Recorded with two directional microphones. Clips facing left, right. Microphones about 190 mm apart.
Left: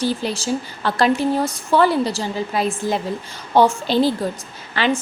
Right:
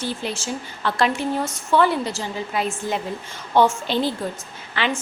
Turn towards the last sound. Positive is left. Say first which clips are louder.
# left 4 dB
turn(degrees=40)  # may be behind; listen again after turning